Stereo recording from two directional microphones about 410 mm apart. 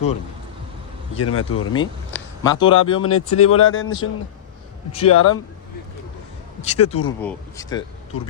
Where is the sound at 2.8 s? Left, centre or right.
Left.